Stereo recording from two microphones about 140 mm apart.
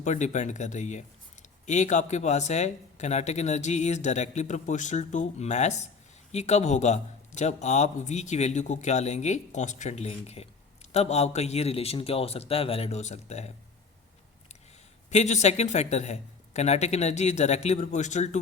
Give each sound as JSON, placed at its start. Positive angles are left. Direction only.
{"t": 0.0, "sound": "a man's voice", "side_deg": 60}
{"t": 15.1, "sound": "a man's voice", "side_deg": 55}